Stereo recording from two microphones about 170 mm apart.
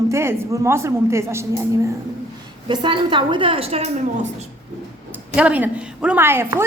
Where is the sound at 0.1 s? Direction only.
15° right (ahead or behind).